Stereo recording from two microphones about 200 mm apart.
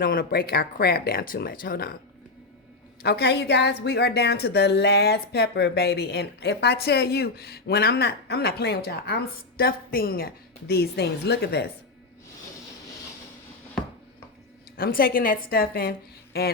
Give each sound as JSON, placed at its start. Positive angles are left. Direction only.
{"t": 0.0, "sound": "a woman's voice", "side_deg": 45}
{"t": 3.0, "sound": "a woman's voice", "side_deg": 55}
{"t": 14.8, "sound": "a woman's voice", "side_deg": 50}